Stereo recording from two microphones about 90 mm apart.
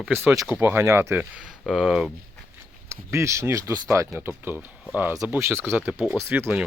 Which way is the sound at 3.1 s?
30° right (ahead or behind).